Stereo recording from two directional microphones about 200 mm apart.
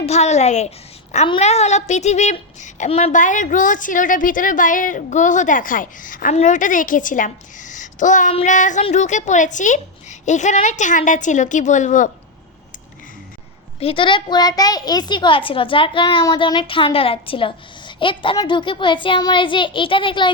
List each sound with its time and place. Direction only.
0.0 s a woman's voice: 35° left (ahead or behind)
13.7 s a woman's voice: 25° left (ahead or behind)